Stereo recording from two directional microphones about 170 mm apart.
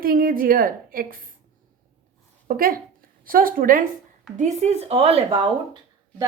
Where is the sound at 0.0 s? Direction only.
55° right (ahead or behind).